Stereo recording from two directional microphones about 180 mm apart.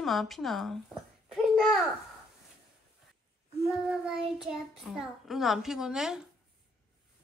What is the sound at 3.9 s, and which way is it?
A child's voice, 5° right (ahead or behind).